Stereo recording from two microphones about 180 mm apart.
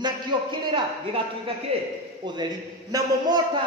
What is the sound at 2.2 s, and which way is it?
A man's voice, 25° right (ahead or behind).